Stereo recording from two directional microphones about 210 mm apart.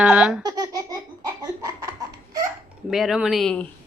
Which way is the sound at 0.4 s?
15° right (ahead or behind).